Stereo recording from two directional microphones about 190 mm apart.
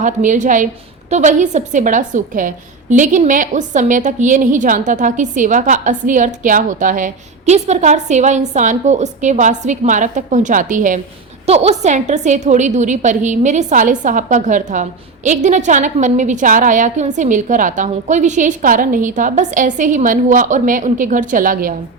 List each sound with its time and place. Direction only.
0.0 s a woman's voice: 40° right (ahead or behind)